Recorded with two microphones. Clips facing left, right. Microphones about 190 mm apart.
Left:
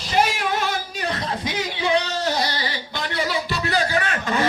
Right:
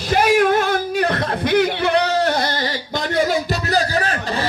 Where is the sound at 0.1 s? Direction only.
55° right (ahead or behind).